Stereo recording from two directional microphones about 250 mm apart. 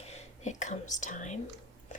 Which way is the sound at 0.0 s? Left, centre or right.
Left.